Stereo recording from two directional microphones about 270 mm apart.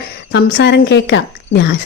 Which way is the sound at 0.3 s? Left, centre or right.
Left.